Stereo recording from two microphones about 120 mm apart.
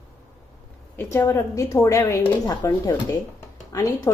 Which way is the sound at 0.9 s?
20° left (ahead or behind).